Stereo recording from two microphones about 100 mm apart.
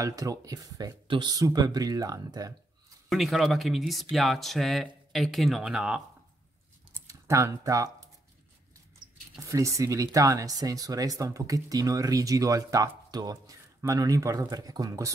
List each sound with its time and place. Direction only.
0.0 s speech: 35° right (ahead or behind)
1.0 s speech: 55° right (ahead or behind)
1.3 s speech: 40° right (ahead or behind)
3.1 s speech: centre (ahead or behind)
7.1 s speech: 30° right (ahead or behind)
9.0 s a sound: 50° right (ahead or behind)
9.4 s speech: 30° right (ahead or behind)